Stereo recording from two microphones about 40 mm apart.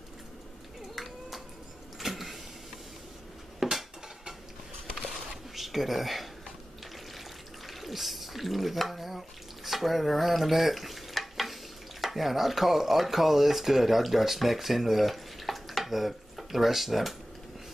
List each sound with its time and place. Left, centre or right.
0.9 s a sound: centre
2.0 s vehicle: centre
3.5 s cutlery: centre
5.5 s speech: centre
7.6 s speech: centre
9.7 s stir: centre
12.0 s speech: centre